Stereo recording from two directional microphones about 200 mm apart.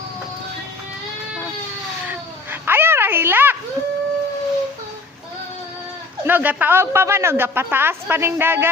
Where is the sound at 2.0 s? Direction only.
10° right (ahead or behind).